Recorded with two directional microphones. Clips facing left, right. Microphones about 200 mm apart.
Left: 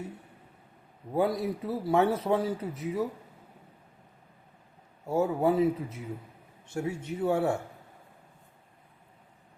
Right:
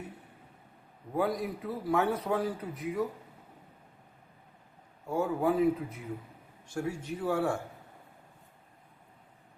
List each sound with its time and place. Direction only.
1.1 s a man's voice: 25° left (ahead or behind)
5.0 s a man's voice: 25° left (ahead or behind)